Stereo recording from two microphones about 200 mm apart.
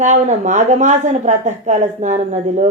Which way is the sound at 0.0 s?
35° right (ahead or behind).